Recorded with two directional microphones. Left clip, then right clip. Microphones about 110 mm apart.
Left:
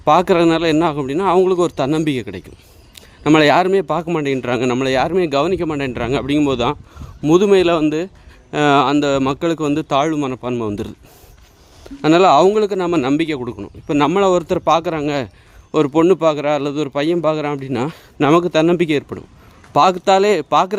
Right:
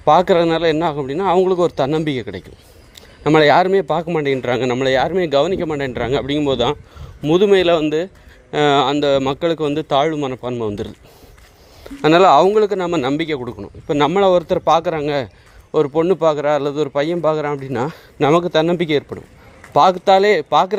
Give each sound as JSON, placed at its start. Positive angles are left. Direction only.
{"t": 0.0, "sound": "a man's voice", "side_deg": 40}
{"t": 7.5, "sound": "a man's voice", "side_deg": 25}
{"t": 12.0, "sound": "a man's voice", "side_deg": 30}
{"t": 14.2, "sound": "a man's voice", "side_deg": 40}
{"t": 15.7, "sound": "a man's voice", "side_deg": 60}